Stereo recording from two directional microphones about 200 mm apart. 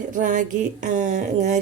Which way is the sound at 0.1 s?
40° right (ahead or behind).